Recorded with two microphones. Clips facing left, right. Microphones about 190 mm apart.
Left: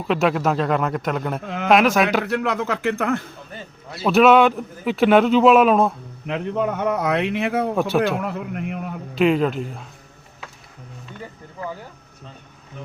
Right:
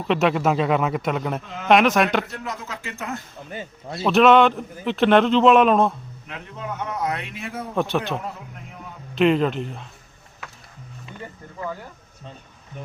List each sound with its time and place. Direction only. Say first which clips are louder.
0.0 s a man's voice: even; centre (ahead or behind)
2.2 s speech: left 11 dB; 70° left (ahead or behind)
3.9 s a man's voice: left 1 dB; 5° left (ahead or behind)
6.2 s a man's voice: left 11 dB; 70° left (ahead or behind)
9.1 s a man's voice: even; centre (ahead or behind)